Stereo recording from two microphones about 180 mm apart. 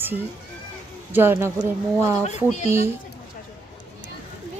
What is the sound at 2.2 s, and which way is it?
Speech, 40° left (ahead or behind).